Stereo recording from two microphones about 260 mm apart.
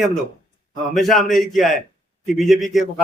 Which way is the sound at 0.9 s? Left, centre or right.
Centre.